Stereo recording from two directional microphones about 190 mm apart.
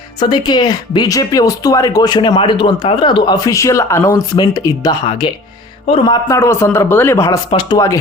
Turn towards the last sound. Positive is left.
turn(degrees=20)  # may be behind; listen again after turning